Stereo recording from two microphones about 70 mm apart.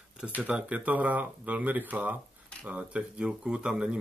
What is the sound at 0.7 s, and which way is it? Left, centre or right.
Speech, right.